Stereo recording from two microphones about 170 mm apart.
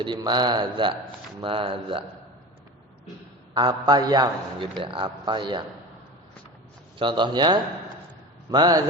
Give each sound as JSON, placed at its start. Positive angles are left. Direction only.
{"t": 0.0, "sound": "speech", "side_deg": -25}
{"t": 3.5, "sound": "speech", "side_deg": -25}
{"t": 7.0, "sound": "speech", "side_deg": -25}